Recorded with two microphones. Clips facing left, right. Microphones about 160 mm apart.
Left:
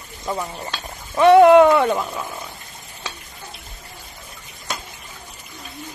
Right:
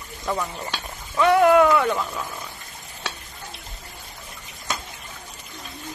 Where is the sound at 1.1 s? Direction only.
30° left (ahead or behind).